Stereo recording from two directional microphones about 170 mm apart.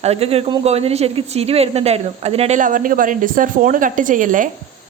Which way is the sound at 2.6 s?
50° right (ahead or behind).